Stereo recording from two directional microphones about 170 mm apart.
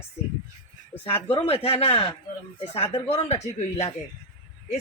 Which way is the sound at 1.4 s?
35° left (ahead or behind).